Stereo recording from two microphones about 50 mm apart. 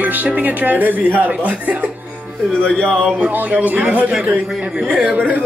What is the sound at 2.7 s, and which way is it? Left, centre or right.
Speech, left.